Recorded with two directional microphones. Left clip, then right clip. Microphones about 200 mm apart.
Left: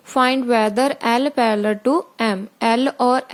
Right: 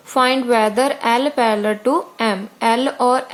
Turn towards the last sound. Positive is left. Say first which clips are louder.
# right 1 dB
turn(degrees=40)  # may be behind; listen again after turning